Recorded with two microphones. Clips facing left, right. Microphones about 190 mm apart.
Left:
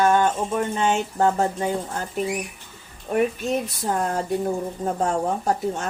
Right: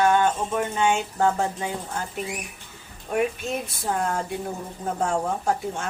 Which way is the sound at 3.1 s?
40° left (ahead or behind).